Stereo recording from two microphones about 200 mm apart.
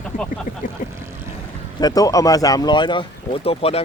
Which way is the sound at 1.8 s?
20° left (ahead or behind).